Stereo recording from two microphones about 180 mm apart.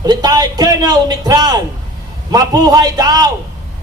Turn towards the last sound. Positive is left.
turn(degrees=-20)  # may be behind; listen again after turning